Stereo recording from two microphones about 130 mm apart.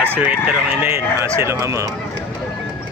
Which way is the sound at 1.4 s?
20° right (ahead or behind).